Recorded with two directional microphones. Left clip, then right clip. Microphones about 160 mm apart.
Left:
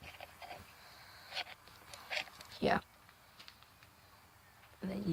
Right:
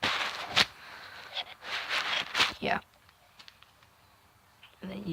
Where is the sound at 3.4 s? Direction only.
45° right (ahead or behind).